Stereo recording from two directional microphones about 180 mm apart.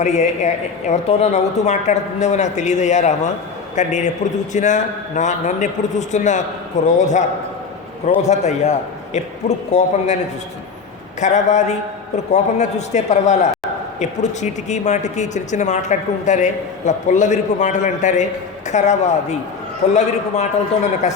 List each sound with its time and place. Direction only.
0.0 s speech: 40° left (ahead or behind)
11.2 s speech: 40° left (ahead or behind)